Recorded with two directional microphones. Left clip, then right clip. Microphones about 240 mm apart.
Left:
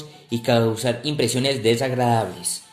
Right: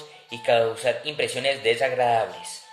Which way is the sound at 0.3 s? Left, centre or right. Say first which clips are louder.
Left 1 dB; centre.